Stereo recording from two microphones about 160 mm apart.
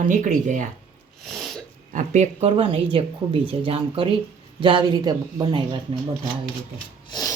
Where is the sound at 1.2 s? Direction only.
Centre (ahead or behind).